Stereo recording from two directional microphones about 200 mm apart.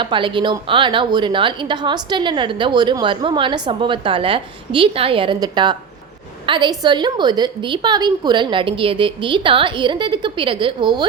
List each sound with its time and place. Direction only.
0.0 s a woman's voice: 25° right (ahead or behind)